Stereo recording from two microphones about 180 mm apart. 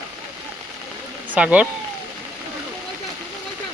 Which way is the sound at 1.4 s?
5° right (ahead or behind).